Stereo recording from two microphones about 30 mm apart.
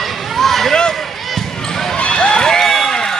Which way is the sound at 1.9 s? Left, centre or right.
Left.